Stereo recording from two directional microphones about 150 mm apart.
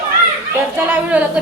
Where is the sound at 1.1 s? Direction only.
10° right (ahead or behind).